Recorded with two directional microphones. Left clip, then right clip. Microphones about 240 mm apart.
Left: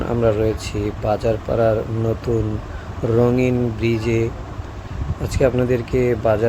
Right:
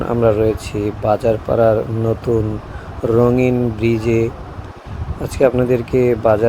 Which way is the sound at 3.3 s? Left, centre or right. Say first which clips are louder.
Right 3 dB; centre.